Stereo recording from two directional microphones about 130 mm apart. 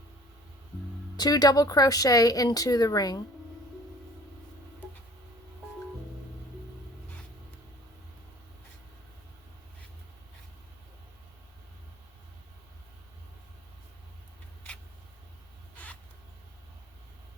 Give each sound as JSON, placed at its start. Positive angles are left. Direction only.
{"t": 1.1, "sound": "speech", "side_deg": 30}
{"t": 15.7, "sound": "vehicle", "side_deg": 10}